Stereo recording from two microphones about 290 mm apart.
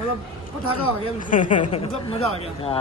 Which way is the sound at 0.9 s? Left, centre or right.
Left.